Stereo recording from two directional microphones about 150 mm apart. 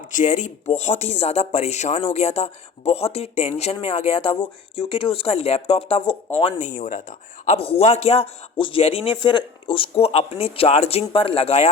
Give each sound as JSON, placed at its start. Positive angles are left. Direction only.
{"t": 0.1, "sound": "a man's voice", "side_deg": 55}
{"t": 6.6, "sound": "speech", "side_deg": 55}
{"t": 7.4, "sound": "a man's voice", "side_deg": 45}